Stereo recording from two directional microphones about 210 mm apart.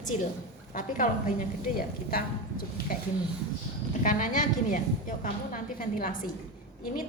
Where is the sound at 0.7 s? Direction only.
40° left (ahead or behind).